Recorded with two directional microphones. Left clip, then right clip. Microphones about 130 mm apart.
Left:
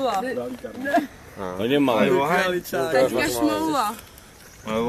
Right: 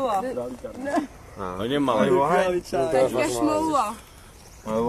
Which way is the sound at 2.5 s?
55° left (ahead or behind).